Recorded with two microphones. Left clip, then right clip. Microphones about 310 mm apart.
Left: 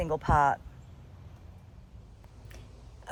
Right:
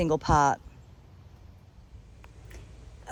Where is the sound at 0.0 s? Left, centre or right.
Right.